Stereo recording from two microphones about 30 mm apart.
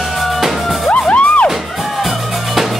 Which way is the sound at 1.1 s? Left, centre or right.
Left.